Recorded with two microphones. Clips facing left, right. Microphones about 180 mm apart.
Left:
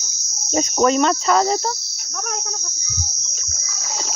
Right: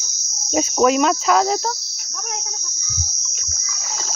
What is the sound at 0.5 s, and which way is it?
Speech, 5° right (ahead or behind).